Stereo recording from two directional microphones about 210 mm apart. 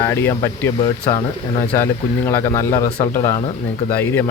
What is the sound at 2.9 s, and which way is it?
Speech, 30° left (ahead or behind).